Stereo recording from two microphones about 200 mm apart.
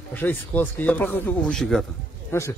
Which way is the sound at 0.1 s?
10° left (ahead or behind).